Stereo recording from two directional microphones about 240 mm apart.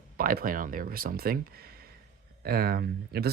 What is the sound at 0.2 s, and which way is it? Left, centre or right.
Speech, right.